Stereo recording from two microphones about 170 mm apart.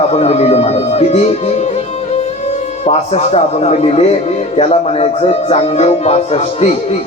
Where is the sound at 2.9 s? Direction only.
40° left (ahead or behind).